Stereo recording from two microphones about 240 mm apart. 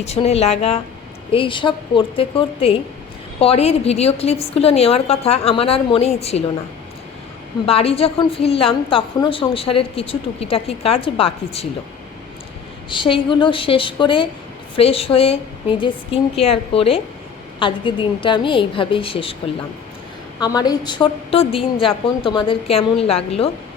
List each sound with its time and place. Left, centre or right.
0.0 s a woman's voice: left
7.7 s a woman's voice: left
12.9 s a woman's voice: left
20.4 s a woman's voice: centre